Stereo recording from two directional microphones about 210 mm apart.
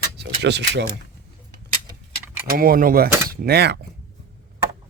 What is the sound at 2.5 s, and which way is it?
Speech, 45° right (ahead or behind).